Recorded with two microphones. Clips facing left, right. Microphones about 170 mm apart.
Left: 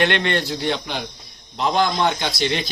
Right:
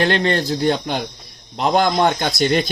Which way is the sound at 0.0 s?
35° right (ahead or behind).